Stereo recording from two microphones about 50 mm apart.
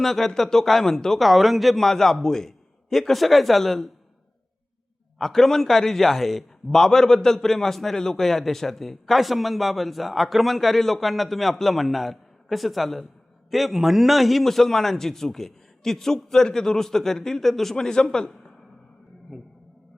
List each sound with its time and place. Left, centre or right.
0.0 s a man's voice: centre
5.1 s a man's voice: centre